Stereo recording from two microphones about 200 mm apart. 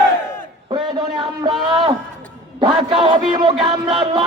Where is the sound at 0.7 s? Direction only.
20° right (ahead or behind).